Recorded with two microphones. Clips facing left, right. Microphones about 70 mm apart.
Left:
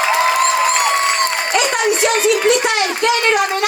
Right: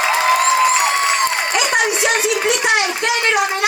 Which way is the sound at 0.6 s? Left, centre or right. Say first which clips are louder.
Even; left.